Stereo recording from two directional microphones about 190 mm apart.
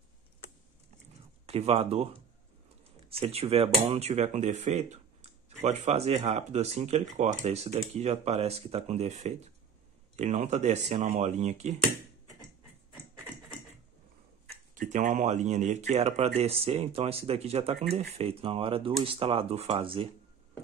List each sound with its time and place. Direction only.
1.4 s speech: 30° right (ahead or behind)
3.1 s speech: 30° right (ahead or behind)
14.8 s speech: 40° right (ahead or behind)